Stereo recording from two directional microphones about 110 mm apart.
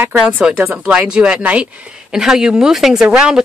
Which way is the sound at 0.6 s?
15° right (ahead or behind).